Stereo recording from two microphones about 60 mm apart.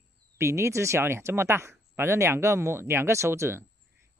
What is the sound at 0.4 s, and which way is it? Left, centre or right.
Speech, right.